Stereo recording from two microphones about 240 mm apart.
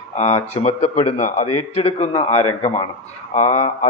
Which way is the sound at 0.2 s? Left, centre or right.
Left.